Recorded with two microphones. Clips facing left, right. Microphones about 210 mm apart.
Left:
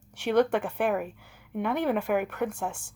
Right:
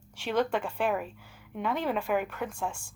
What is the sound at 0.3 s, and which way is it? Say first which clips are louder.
A woman's voice: left 5 dB; 65° left (ahead or behind).